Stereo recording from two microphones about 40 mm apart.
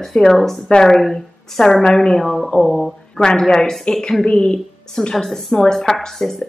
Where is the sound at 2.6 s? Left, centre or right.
Centre.